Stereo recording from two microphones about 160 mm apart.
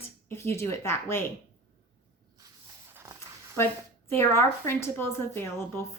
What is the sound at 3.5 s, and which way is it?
A woman's voice, 15° left (ahead or behind).